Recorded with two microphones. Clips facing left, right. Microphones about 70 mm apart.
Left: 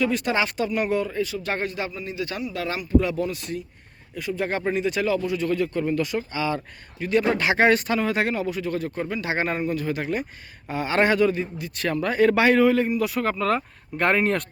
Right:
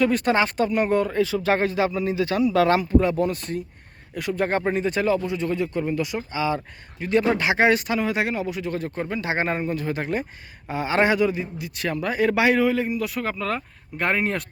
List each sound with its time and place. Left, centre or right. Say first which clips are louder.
0.0 s speech: right 3 dB; right
1.5 s speech: right 7 dB; right
3.0 s speech: right 3 dB; right
4.1 s speech: right 3 dB; right
4.7 s a man's voice: right 1 dB; right; by 14.4 s centre